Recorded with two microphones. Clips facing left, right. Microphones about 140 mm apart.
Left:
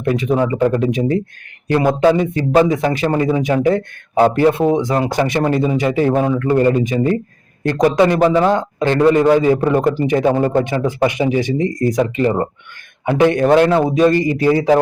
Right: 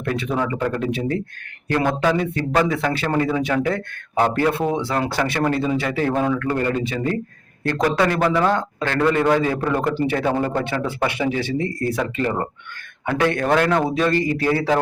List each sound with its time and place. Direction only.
0.0 s a man's voice: 15° left (ahead or behind)
1.9 s a man's voice: 25° left (ahead or behind)